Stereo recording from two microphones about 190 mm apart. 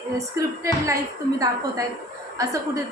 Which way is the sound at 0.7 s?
15° right (ahead or behind).